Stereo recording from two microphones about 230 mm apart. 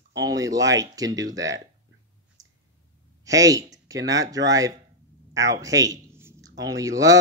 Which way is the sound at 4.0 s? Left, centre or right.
Right.